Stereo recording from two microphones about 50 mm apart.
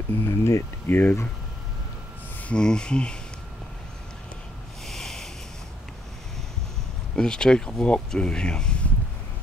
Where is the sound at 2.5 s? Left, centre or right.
Centre.